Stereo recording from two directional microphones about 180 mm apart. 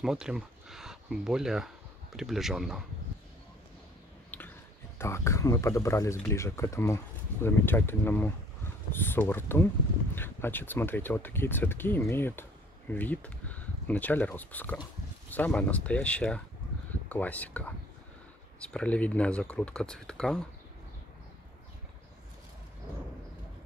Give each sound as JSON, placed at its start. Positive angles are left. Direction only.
{"t": 0.0, "sound": "speech", "side_deg": -5}
{"t": 4.9, "sound": "speech", "side_deg": 15}